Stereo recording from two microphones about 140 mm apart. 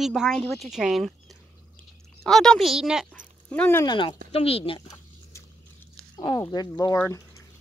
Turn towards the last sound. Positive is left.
turn(degrees=25)  # may be behind; listen again after turning